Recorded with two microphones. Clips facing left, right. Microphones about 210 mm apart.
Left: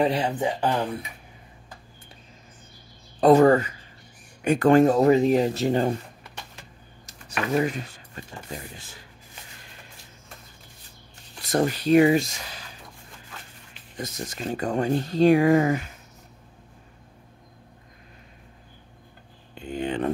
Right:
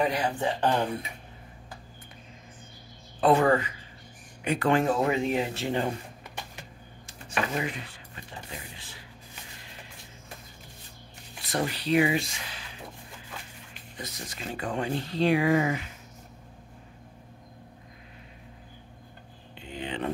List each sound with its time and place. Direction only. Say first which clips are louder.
0.0 s speech: left 4 dB; 25° left (ahead or behind)
0.4 s speech: left 2 dB; 10° left (ahead or behind)
3.2 s speech: left 6 dB; 40° left (ahead or behind)
7.1 s a sound: left 4 dB; 40° left (ahead or behind)
11.4 s speech: left 7 dB; 45° left (ahead or behind)
13.9 s speech: left 7 dB; 45° left (ahead or behind)
19.5 s a sound: left 7 dB; 45° left (ahead or behind)